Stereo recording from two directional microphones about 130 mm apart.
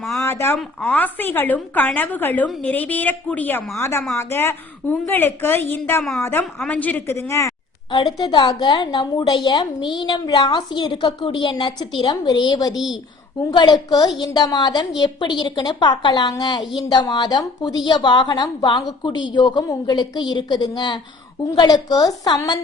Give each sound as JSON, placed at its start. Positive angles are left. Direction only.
{"t": 0.1, "sound": "a woman's voice", "side_deg": 20}
{"t": 6.0, "sound": "a woman's voice", "side_deg": 0}
{"t": 7.9, "sound": "a woman's voice", "side_deg": 35}